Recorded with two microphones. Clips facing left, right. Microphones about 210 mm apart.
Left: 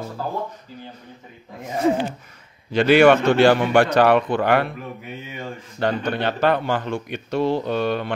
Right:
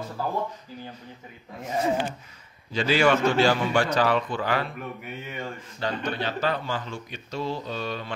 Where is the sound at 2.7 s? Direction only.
65° left (ahead or behind).